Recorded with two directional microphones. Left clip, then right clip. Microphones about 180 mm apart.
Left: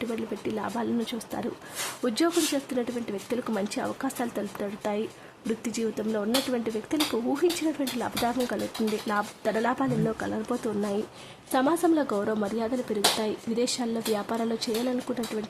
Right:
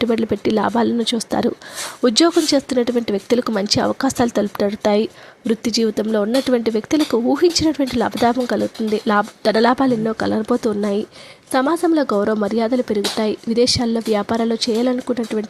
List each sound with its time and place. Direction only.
0.0 s speech: 40° right (ahead or behind)